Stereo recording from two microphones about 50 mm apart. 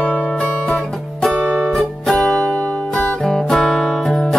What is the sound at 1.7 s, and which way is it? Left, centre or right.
Music, centre.